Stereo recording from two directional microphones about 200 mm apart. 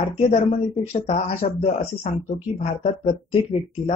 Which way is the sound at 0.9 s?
30° left (ahead or behind).